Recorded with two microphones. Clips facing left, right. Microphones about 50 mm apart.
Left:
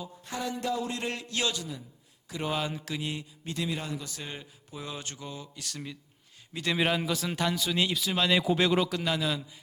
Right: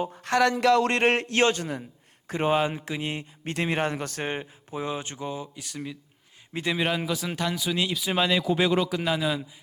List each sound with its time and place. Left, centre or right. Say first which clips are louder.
0.1 s a man's voice: right 13 dB; right
2.2 s speech: right 8 dB; right
3.5 s speech: right 7 dB; right; by 6.0 s centre
6.7 s a man's voice: left 1 dB; centre
8.0 s speech: right 3 dB; centre
8.3 s a man's voice: even; centre